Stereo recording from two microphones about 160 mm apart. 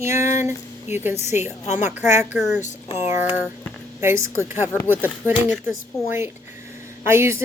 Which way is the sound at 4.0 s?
15° right (ahead or behind).